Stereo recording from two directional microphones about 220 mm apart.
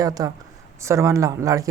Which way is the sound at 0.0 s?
15° right (ahead or behind).